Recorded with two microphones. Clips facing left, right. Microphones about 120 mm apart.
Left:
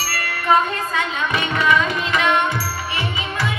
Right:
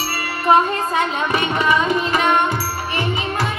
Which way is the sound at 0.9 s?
30° right (ahead or behind).